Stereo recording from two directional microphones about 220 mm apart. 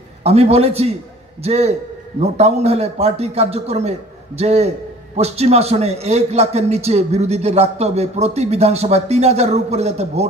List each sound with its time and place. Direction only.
0.2 s a man's voice: 30° right (ahead or behind)